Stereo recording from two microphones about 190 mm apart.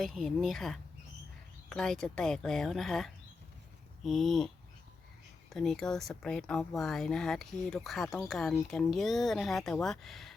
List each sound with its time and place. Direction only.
0.0 s speech: centre (ahead or behind)
5.5 s speech: 5° left (ahead or behind)